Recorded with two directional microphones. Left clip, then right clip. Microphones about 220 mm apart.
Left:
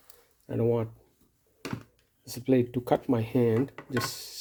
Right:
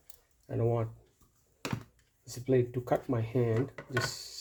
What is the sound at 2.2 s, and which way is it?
Speech, 50° left (ahead or behind).